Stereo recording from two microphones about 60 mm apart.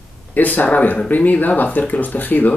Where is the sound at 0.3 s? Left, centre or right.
Left.